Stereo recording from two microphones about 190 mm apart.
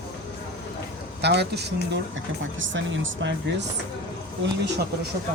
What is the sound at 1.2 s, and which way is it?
Speech, 60° right (ahead or behind).